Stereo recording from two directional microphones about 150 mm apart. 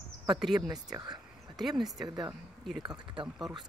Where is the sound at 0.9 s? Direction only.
25° right (ahead or behind).